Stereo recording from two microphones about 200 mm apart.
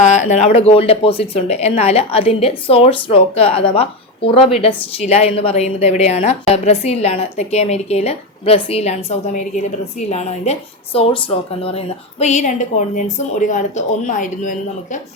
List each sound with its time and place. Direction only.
0.0 s speech: 35° left (ahead or behind)
12.2 s speech: 35° left (ahead or behind)